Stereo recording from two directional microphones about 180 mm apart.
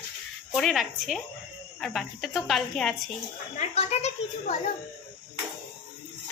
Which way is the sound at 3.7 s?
35° left (ahead or behind).